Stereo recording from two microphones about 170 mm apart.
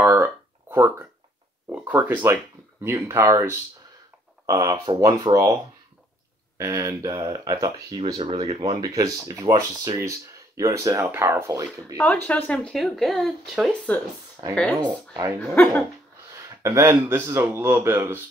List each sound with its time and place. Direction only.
0.0 s a sound: 15° right (ahead or behind)
1.7 s speech: 10° right (ahead or behind)
6.6 s speech: 20° right (ahead or behind)
12.0 s speech: 10° left (ahead or behind)
14.8 s speech: 25° right (ahead or behind)
15.5 s speech: 10° left (ahead or behind)
16.3 s speech: 15° right (ahead or behind)